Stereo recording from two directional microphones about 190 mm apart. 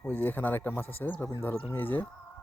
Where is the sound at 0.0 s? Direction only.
10° left (ahead or behind).